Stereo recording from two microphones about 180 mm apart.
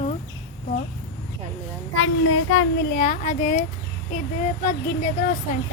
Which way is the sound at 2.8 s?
55° left (ahead or behind).